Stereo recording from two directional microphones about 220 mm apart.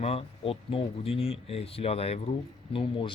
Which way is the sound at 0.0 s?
25° left (ahead or behind).